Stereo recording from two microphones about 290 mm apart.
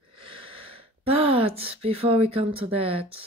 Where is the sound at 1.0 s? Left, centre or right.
Centre.